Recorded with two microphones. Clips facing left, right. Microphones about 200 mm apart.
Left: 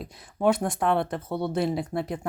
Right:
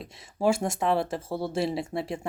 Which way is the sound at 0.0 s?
Centre (ahead or behind).